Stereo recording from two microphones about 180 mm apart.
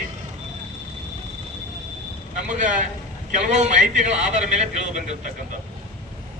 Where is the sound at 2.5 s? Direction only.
45° right (ahead or behind).